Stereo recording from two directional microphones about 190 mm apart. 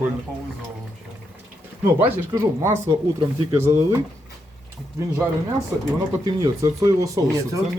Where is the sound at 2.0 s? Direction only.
15° right (ahead or behind).